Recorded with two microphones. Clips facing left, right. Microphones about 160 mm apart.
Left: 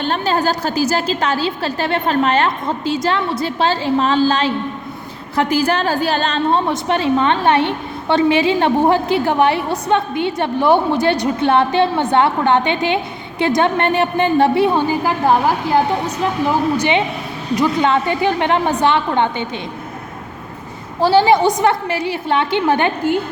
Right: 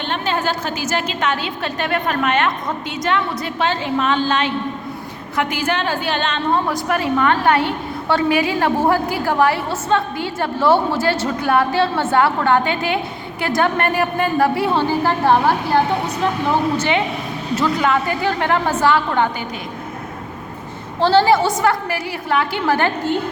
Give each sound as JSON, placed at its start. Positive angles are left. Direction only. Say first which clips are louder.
{"t": 0.0, "sound": "a woman's voice", "louder": "left 4 dB", "side_deg": 40}
{"t": 6.7, "sound": "a woman's voice", "louder": "left 3 dB", "side_deg": 25}
{"t": 16.7, "sound": "a woman's voice", "louder": "left 2 dB", "side_deg": 15}
{"t": 21.0, "sound": "a woman's voice", "louder": "left 2 dB", "side_deg": 15}